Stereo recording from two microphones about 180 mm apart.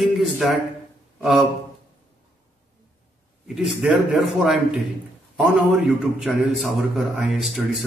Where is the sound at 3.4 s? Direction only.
5° right (ahead or behind).